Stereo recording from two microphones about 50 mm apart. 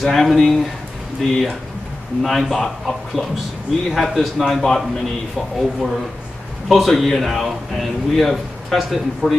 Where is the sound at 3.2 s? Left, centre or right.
Centre.